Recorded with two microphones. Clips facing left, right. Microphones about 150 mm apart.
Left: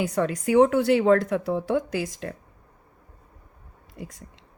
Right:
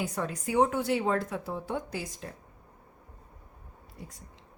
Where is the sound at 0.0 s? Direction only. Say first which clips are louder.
Left 8 dB; 90° left.